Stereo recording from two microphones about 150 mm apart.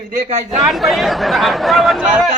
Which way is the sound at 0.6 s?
Centre (ahead or behind).